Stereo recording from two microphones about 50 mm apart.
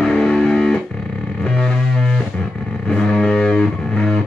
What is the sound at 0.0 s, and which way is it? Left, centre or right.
Music, centre.